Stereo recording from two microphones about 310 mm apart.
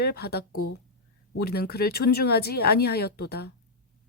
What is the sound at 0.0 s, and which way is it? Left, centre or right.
Speech, left.